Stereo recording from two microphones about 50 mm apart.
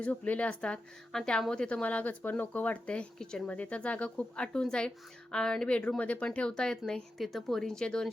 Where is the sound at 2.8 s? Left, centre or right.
Left.